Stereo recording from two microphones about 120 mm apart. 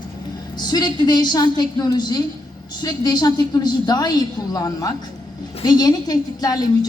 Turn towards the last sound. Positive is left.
turn(degrees=30)  # may be behind; listen again after turning